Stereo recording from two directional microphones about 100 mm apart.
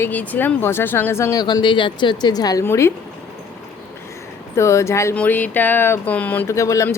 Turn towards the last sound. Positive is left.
turn(degrees=30)  # may be behind; listen again after turning